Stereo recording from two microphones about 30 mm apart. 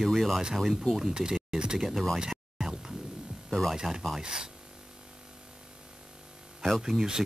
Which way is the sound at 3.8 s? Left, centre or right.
Right.